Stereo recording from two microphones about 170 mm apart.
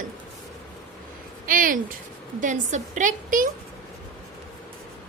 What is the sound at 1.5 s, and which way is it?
A woman's voice, 55° right (ahead or behind).